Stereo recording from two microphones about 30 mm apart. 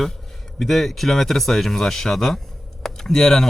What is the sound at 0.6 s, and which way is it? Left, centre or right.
Speech, centre.